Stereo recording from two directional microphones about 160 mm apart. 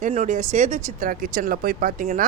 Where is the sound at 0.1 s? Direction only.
45° right (ahead or behind).